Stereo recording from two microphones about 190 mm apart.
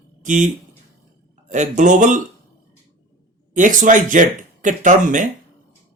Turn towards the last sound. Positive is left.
turn(degrees=-45)  # may be behind; listen again after turning